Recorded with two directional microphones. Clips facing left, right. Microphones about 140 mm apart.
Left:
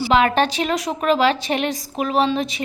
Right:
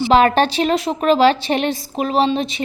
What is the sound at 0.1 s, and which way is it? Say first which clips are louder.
A woman's voice: right 3 dB; 35° right (ahead or behind).